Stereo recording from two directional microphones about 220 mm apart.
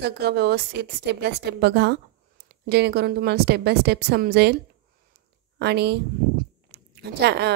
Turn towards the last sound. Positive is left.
turn(degrees=-50)  # may be behind; listen again after turning